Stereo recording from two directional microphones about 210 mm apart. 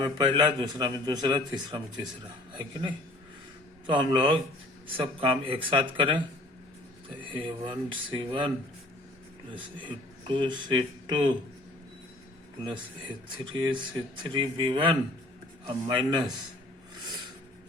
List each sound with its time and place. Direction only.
0.0 s a man's voice: 20° right (ahead or behind)
10.2 s a man's voice: 20° right (ahead or behind)
13.4 s a man's voice: 20° right (ahead or behind)